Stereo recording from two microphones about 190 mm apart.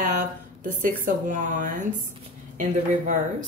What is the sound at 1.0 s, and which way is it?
Speech, 45° right (ahead or behind).